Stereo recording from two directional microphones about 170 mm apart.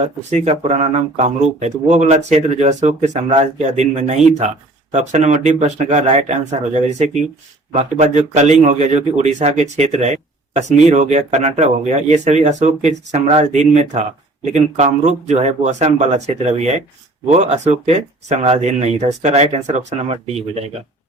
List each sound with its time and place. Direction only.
0.0 s speech: 40° right (ahead or behind)